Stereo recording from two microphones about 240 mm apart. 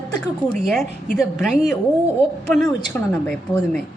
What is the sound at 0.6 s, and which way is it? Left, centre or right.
A woman's voice, centre.